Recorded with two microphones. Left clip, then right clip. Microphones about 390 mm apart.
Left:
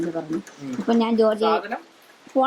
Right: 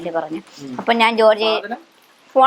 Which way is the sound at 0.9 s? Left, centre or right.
Right.